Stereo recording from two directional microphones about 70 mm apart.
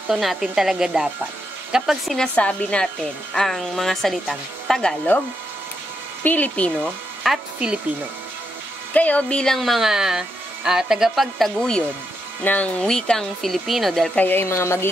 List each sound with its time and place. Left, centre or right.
0.1 s speech: centre
2.1 s speech: centre
3.3 s speech: centre
6.2 s speech: left
7.2 s speech: centre
8.9 s speech: centre
12.4 s speech: centre
14.1 s speech: left
14.4 s speech: left